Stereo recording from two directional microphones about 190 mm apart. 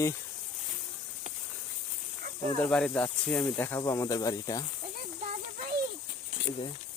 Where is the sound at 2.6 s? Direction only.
5° left (ahead or behind).